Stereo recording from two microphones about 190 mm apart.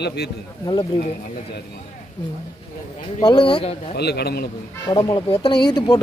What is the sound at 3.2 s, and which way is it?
Speech, 25° left (ahead or behind).